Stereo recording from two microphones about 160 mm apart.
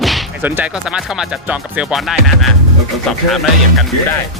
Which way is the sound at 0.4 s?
10° right (ahead or behind).